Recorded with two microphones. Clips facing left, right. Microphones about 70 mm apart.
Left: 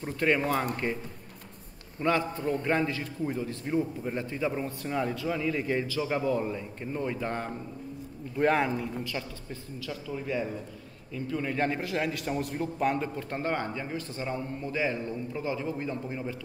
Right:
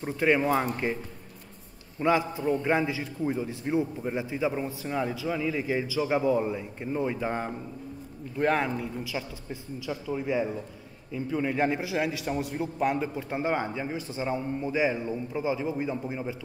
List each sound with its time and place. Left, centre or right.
0.0 s a man's voice: centre
2.0 s a man's voice: centre
8.4 s a man's voice: centre